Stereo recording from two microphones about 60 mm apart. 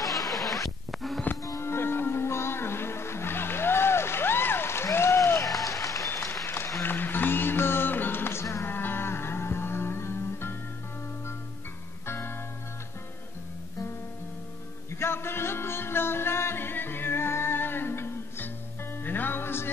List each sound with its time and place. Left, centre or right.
0.1 s a sound: centre
1.6 s music: left
4.9 s applause: left
6.8 s music: left
8.6 s music: left
12.1 s music: left
14.9 s music: left